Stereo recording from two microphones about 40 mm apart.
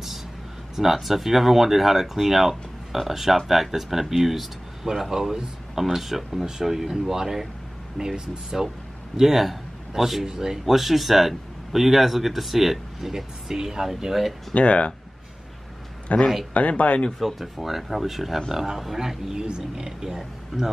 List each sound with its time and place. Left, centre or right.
0.7 s speech: centre
14.5 s speech: left
16.1 s speech: left
17.4 s speech: centre